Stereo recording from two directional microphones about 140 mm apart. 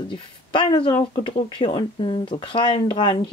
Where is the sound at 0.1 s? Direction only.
35° left (ahead or behind).